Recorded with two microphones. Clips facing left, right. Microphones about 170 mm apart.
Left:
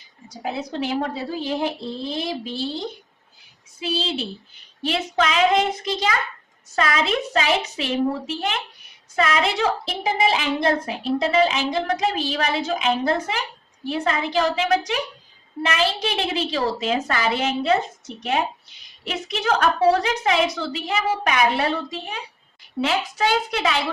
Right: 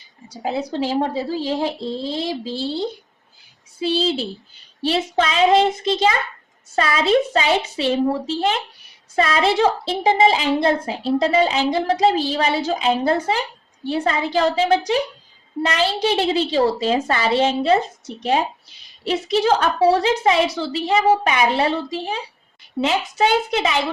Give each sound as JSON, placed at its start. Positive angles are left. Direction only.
{"t": 0.3, "sound": "a woman's voice", "side_deg": -30}
{"t": 9.1, "sound": "a woman's voice", "side_deg": -30}